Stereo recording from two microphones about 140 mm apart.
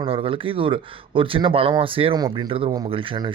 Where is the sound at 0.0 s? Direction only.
40° right (ahead or behind).